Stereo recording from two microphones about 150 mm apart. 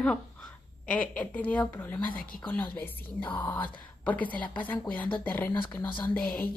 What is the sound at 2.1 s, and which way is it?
Speech, 70° left (ahead or behind).